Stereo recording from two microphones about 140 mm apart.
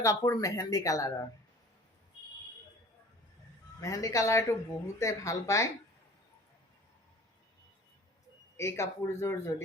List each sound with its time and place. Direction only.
0.0 s speech: 25° left (ahead or behind)
3.8 s speech: 25° left (ahead or behind)
8.5 s speech: 20° left (ahead or behind)